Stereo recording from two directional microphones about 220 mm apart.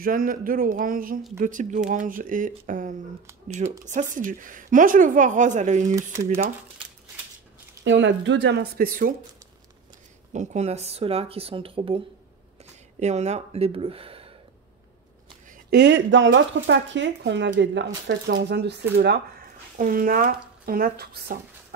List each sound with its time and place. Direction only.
0.0 s a woman's voice: 40° right (ahead or behind)
7.8 s speech: 55° right (ahead or behind); by 9.1 s 40° right (ahead or behind)
10.3 s speech: 30° right (ahead or behind)
13.0 s speech: 30° right (ahead or behind)
15.7 s speech: 50° right (ahead or behind)